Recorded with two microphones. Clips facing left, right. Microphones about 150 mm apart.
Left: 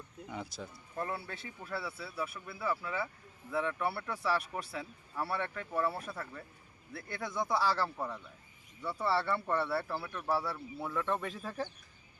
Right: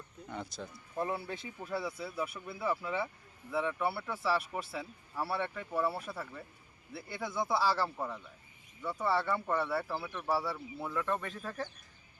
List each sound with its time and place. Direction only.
0.3 s speech: 5° left (ahead or behind)
0.9 s speech: 15° right (ahead or behind)
8.8 s speech: 15° right (ahead or behind)
9.0 s speech: 5° left (ahead or behind)